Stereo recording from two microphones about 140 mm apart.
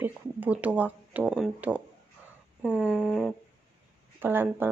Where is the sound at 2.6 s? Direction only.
10° left (ahead or behind).